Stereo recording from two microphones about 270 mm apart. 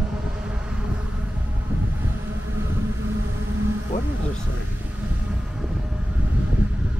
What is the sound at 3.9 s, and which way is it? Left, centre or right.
Bee, left.